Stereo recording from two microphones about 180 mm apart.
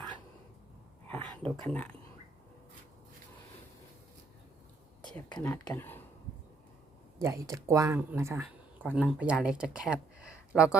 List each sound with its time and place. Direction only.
1.0 s a sound: 10° left (ahead or behind)
1.6 s speech: 10° left (ahead or behind)
5.4 s speech: 15° left (ahead or behind)
7.2 s speech: 20° right (ahead or behind)